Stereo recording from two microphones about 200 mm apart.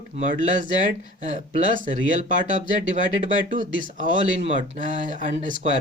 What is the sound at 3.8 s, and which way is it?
Speech, 40° right (ahead or behind).